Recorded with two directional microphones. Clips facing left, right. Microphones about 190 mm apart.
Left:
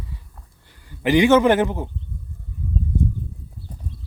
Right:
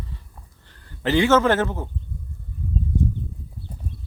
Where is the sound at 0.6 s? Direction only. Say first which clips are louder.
Left 3 dB; 10° left (ahead or behind).